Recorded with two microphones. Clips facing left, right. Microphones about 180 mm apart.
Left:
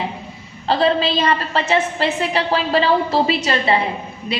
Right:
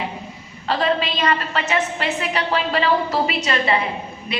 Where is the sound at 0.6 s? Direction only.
30° left (ahead or behind).